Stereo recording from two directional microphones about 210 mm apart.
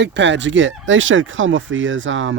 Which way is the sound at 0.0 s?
55° right (ahead or behind).